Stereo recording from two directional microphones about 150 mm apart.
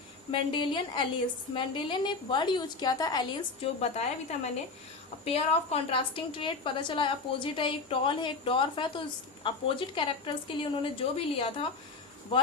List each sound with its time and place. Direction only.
0.3 s a woman's voice: 35° left (ahead or behind)
3.6 s a woman's voice: 45° left (ahead or behind)